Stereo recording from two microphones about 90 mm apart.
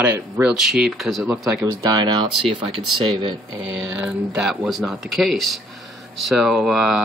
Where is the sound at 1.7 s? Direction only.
40° right (ahead or behind).